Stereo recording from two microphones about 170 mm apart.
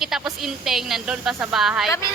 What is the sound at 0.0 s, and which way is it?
Speech, centre (ahead or behind).